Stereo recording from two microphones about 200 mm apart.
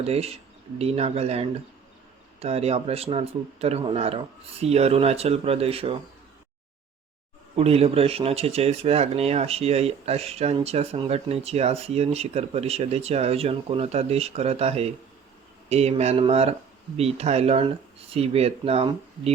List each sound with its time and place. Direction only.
0.0 s speech: 30° right (ahead or behind)
7.5 s speech: 30° right (ahead or behind)